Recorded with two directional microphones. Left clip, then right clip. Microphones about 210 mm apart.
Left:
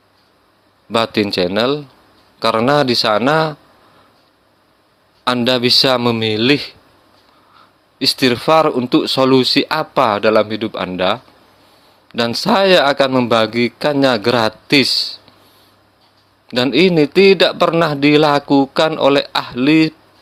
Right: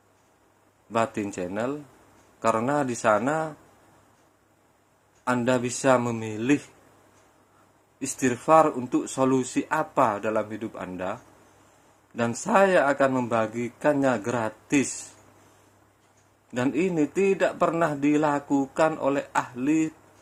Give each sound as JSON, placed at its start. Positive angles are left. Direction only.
{"t": 0.9, "sound": "a man's voice", "side_deg": 45}
{"t": 5.2, "sound": "a man's voice", "side_deg": 45}
{"t": 6.0, "sound": "speech", "side_deg": 35}
{"t": 6.2, "sound": "a man's voice", "side_deg": 50}
{"t": 7.9, "sound": "a man's voice", "side_deg": 50}
{"t": 16.5, "sound": "a man's voice", "side_deg": 50}